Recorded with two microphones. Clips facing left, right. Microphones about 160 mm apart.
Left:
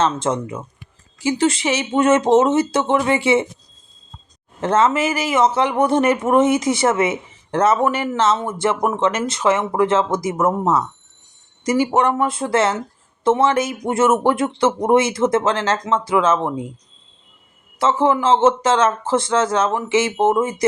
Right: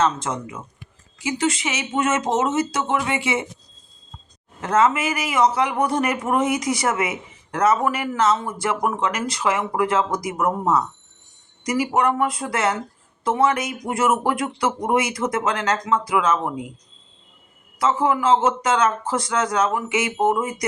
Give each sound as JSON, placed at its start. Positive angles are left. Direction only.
{"t": 0.0, "sound": "speech", "side_deg": 30}
{"t": 4.6, "sound": "speech", "side_deg": 25}
{"t": 17.7, "sound": "speech", "side_deg": 25}